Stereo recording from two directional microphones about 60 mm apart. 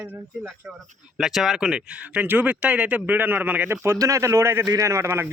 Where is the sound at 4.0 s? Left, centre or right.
Right.